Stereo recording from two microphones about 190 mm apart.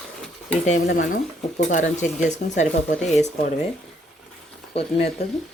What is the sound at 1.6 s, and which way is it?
Speech, 40° left (ahead or behind).